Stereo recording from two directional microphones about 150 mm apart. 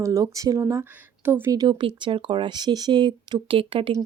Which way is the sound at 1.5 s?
30° right (ahead or behind).